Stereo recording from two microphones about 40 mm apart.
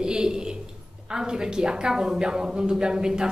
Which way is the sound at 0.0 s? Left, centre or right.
Right.